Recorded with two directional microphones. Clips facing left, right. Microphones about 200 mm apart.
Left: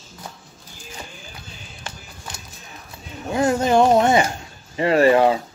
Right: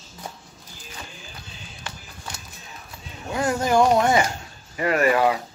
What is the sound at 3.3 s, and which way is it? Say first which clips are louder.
Speech: left 4 dB; 20° left (ahead or behind).